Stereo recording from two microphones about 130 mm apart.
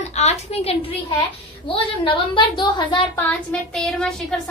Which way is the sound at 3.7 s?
5° left (ahead or behind).